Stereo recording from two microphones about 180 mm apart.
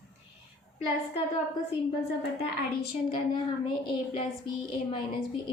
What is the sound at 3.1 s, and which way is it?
A woman's voice, 25° left (ahead or behind).